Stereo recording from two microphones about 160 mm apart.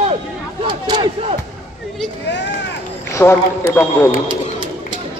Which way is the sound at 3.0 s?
15° left (ahead or behind).